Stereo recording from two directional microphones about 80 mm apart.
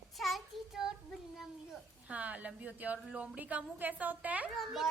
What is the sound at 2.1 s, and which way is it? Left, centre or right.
A woman's voice, centre.